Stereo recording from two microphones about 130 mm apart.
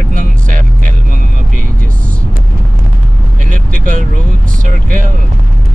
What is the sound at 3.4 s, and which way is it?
Vehicle, 90° right.